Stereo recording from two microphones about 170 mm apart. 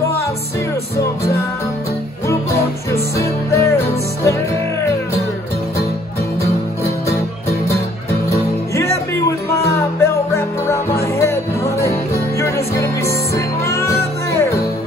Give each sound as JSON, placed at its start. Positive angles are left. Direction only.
{"t": 2.2, "sound": "music", "side_deg": 15}
{"t": 8.3, "sound": "music", "side_deg": 20}
{"t": 10.0, "sound": "music", "side_deg": 15}